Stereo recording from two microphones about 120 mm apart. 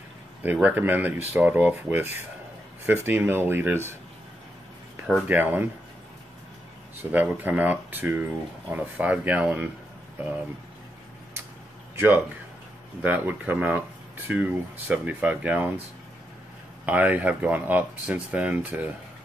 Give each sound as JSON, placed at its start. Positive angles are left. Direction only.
{"t": 0.4, "sound": "speech", "side_deg": -15}
{"t": 3.1, "sound": "speech", "side_deg": -20}
{"t": 5.3, "sound": "speech", "side_deg": -15}
{"t": 7.1, "sound": "speech", "side_deg": -15}
{"t": 11.9, "sound": "a sound", "side_deg": -15}
{"t": 13.0, "sound": "speech", "side_deg": -15}
{"t": 16.8, "sound": "speech", "side_deg": -15}